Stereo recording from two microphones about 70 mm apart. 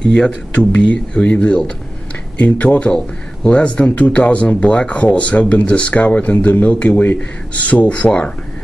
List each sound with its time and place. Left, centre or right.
0.0 s speech: centre